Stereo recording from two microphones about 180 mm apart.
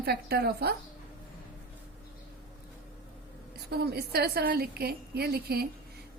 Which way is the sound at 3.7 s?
60° right (ahead or behind).